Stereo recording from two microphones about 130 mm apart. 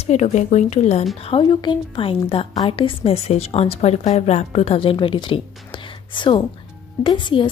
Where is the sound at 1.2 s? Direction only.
45° left (ahead or behind).